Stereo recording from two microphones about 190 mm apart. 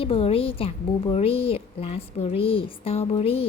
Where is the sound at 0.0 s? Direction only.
30° left (ahead or behind).